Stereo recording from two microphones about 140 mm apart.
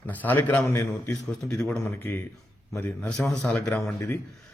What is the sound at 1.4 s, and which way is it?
Speech, 5° left (ahead or behind).